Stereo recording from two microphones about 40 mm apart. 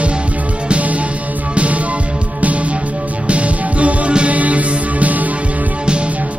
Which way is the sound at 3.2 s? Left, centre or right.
Right.